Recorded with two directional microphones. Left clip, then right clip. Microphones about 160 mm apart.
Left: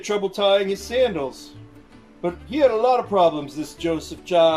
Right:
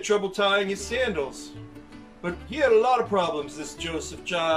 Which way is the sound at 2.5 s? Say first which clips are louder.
Left 2 dB; 30° left (ahead or behind).